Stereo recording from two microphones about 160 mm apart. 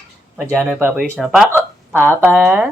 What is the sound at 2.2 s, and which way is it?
Speech, 10° right (ahead or behind).